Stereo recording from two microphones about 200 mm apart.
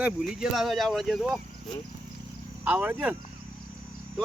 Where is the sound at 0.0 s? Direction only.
5° right (ahead or behind).